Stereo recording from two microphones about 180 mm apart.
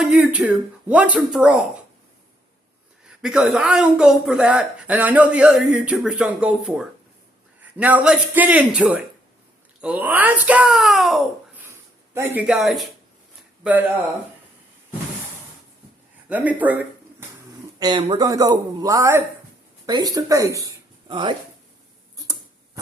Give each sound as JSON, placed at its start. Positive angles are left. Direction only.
{"t": 0.0, "sound": "a child's voice", "side_deg": -5}
{"t": 3.2, "sound": "a child's voice", "side_deg": -5}
{"t": 16.3, "sound": "speech", "side_deg": -10}
{"t": 17.7, "sound": "speech", "side_deg": -25}